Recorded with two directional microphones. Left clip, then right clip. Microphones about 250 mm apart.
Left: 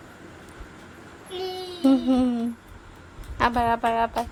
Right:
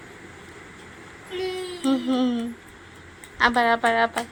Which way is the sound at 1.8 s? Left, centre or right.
Left.